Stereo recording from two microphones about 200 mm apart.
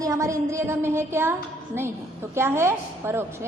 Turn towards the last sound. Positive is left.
turn(degrees=-10)  # may be behind; listen again after turning